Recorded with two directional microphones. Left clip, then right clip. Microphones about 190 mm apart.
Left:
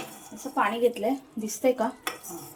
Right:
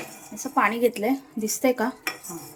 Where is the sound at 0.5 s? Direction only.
50° right (ahead or behind).